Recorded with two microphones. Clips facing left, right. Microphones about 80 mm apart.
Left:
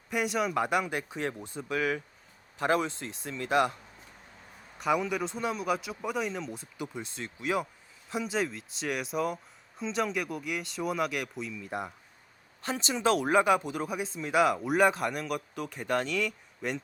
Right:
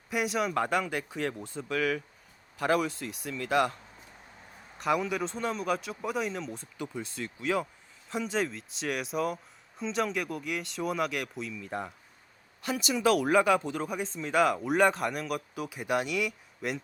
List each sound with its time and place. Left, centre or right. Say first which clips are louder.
0.1 s speech: even; centre
0.6 s speech: even; centre
4.8 s speech: even; centre
6.7 s speech: right 2 dB; left
8.1 s speech: even; centre
12.6 s speech: right 1 dB; left
13.7 s speech: even; centre